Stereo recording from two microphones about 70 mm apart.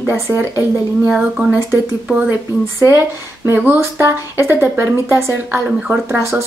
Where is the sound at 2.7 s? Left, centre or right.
Right.